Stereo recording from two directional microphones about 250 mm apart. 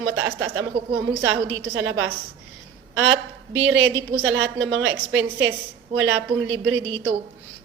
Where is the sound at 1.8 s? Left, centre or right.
Right.